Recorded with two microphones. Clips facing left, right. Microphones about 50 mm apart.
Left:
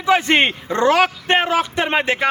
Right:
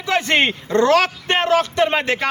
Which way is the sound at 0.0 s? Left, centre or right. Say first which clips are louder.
Left 2 dB; centre.